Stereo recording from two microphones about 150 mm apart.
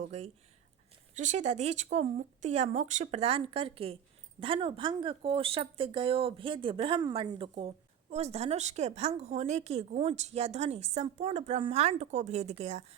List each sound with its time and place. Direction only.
0.0 s speech: 45° right (ahead or behind)